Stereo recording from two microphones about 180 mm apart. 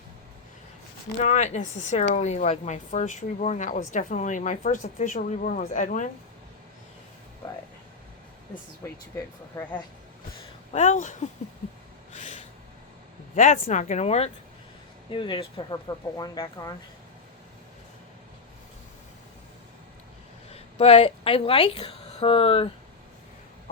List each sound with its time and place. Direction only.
1.2 s speech: 40° left (ahead or behind)
8.8 s speech: 15° left (ahead or behind)
10.7 s speech: 40° left (ahead or behind)
12.1 s snort: 40° left (ahead or behind)
13.3 s speech: 45° left (ahead or behind); by 16.7 s 20° left (ahead or behind)
20.5 s speech: 35° left (ahead or behind)